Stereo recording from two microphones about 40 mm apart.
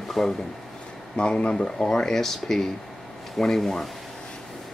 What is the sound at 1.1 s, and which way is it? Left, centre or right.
Speech, left.